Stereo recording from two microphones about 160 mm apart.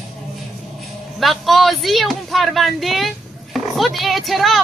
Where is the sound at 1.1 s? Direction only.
Centre (ahead or behind).